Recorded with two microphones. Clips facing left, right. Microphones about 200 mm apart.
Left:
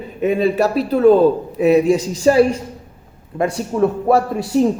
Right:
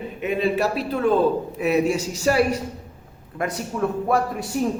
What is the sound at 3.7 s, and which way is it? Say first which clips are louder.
Speech: left 8 dB; 45° left (ahead or behind).